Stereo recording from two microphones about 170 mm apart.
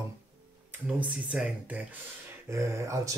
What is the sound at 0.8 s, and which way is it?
Speech, 10° right (ahead or behind).